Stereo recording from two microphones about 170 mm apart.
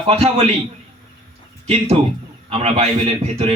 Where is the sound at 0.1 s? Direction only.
35° right (ahead or behind).